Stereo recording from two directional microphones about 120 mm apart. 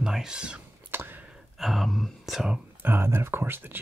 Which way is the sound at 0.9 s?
15° right (ahead or behind).